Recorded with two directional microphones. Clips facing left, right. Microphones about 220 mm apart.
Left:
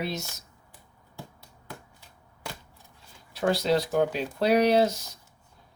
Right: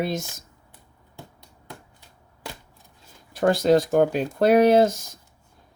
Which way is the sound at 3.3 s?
50° right (ahead or behind).